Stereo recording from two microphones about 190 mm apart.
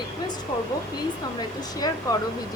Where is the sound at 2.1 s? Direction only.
20° left (ahead or behind).